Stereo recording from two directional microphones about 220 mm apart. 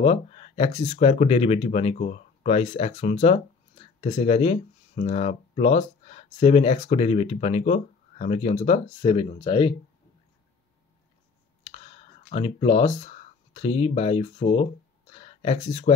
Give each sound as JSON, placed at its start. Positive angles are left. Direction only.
{"t": 0.0, "sound": "speech", "side_deg": 30}
{"t": 11.7, "sound": "speech", "side_deg": 25}
{"t": 15.1, "sound": "a sound", "side_deg": 25}